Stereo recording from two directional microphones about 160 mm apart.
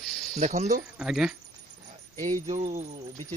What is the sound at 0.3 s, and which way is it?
Speech, 50° right (ahead or behind).